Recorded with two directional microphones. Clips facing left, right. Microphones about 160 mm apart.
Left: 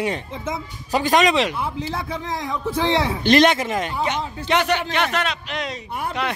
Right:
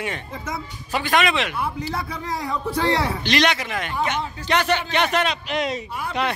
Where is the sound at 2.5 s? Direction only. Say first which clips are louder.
Even; 20° left (ahead or behind).